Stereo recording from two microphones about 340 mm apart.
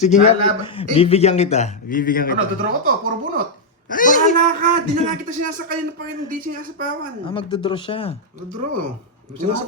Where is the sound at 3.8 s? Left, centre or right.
Left.